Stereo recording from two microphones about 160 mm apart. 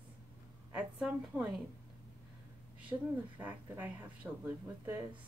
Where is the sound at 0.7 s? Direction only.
5° right (ahead or behind).